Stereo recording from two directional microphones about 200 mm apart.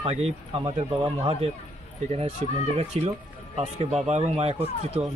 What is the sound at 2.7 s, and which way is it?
Speech, 30° right (ahead or behind).